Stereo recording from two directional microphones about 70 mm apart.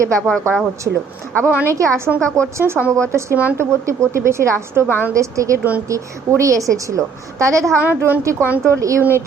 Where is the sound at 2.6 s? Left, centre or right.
Right.